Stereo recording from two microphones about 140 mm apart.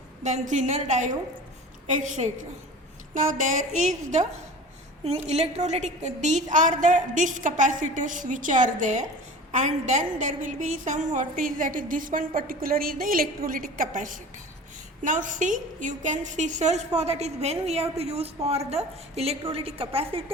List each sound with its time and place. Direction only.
0.2 s a woman's voice: 60° right (ahead or behind)
5.0 s a woman's voice: 50° right (ahead or behind)